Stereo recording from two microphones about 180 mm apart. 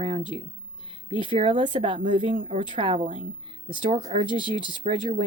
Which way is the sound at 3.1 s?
40° right (ahead or behind).